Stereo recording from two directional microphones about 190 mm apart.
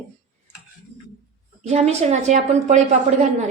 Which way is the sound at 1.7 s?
35° right (ahead or behind).